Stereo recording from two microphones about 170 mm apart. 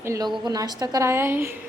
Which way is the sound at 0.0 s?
20° right (ahead or behind).